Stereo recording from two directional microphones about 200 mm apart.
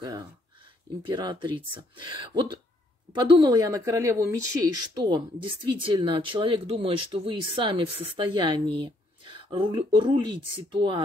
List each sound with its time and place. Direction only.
1.0 s a woman's voice: 20° right (ahead or behind)